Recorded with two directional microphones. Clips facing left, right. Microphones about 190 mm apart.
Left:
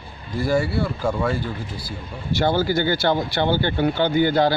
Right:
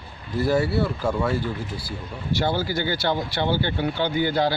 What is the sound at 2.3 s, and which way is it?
Speech, 50° left (ahead or behind).